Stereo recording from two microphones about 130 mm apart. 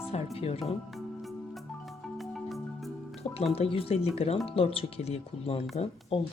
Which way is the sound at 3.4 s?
50° left (ahead or behind).